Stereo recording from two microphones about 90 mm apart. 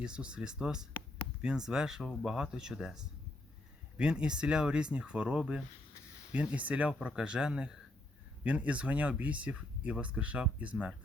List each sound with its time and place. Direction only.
0.0 s speech: 10° right (ahead or behind)